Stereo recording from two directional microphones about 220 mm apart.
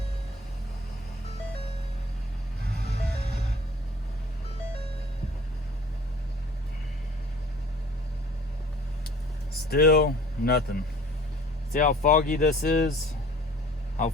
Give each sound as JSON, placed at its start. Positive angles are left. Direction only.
{"t": 9.6, "sound": "speech", "side_deg": 45}